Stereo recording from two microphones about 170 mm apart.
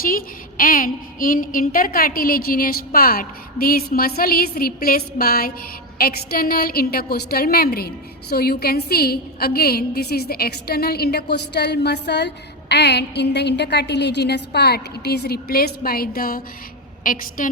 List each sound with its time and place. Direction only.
0.0 s a woman's voice: 55° left (ahead or behind)